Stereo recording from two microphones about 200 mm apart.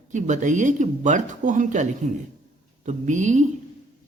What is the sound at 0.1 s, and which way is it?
A woman's voice, 35° right (ahead or behind).